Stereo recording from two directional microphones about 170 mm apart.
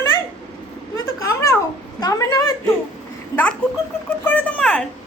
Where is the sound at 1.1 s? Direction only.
20° left (ahead or behind).